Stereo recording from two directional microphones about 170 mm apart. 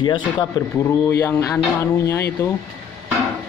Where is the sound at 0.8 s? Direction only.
15° left (ahead or behind).